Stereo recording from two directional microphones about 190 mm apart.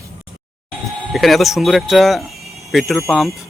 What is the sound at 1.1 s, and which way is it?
Speech, centre (ahead or behind).